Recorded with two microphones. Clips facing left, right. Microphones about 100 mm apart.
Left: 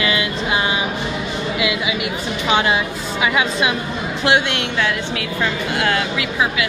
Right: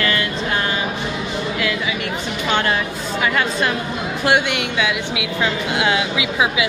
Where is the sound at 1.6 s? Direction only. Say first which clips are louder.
Left 3 dB; 10° left (ahead or behind).